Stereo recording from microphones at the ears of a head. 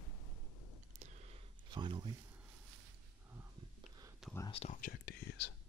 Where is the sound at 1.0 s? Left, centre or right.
Right.